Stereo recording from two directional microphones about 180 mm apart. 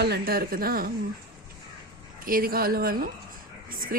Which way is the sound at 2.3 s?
55° right (ahead or behind).